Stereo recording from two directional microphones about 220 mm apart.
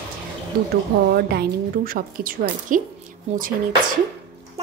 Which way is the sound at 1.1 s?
45° right (ahead or behind).